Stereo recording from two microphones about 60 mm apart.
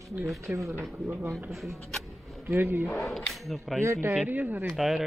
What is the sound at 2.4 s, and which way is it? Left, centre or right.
Speech, right.